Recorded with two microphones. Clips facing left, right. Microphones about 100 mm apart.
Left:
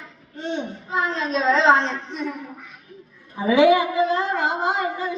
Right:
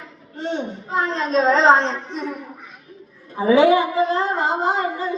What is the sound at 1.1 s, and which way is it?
Speech, 35° right (ahead or behind).